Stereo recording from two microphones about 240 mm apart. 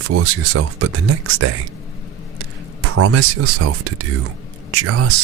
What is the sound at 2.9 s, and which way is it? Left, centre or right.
Speech, right.